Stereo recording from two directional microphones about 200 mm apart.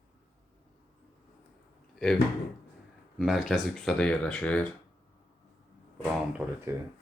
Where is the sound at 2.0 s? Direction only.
Centre (ahead or behind).